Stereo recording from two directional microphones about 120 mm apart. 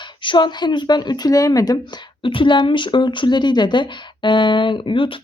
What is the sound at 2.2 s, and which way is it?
A woman's voice, 45° left (ahead or behind).